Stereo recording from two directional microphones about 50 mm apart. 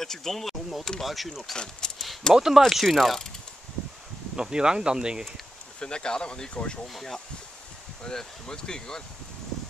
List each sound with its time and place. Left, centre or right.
0.0 s speech: centre
1.0 s mechanisms: centre
1.6 s speech: centre
2.3 s speech: centre
2.7 s mechanisms: centre
4.4 s speech: centre
5.8 s speech: centre
6.9 s mechanisms: centre
8.0 s speech: centre